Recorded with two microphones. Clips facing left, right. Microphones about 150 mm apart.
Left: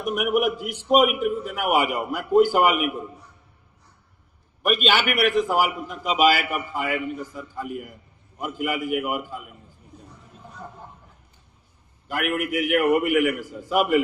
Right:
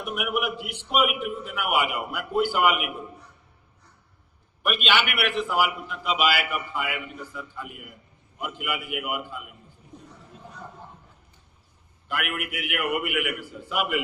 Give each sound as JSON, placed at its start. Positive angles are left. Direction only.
{"t": 0.2, "sound": "a man's voice", "side_deg": 40}
{"t": 4.6, "sound": "a man's voice", "side_deg": 40}
{"t": 12.0, "sound": "a man's voice", "side_deg": 40}